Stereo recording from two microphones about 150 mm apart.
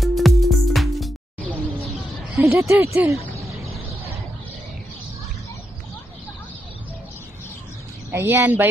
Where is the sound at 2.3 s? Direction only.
15° right (ahead or behind).